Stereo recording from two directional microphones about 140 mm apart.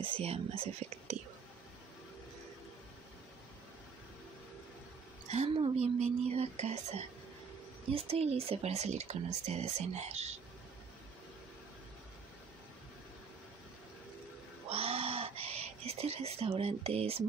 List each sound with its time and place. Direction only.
0.0 s speech: 45° right (ahead or behind)
5.3 s speech: 45° right (ahead or behind)
14.7 s bird: 45° right (ahead or behind)